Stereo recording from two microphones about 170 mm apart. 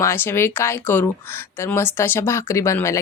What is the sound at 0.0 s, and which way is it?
Speech, 15° left (ahead or behind).